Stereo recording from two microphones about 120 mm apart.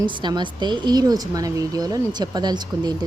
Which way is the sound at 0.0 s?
40° right (ahead or behind).